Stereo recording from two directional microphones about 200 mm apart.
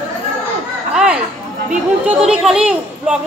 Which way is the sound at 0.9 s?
5° right (ahead or behind).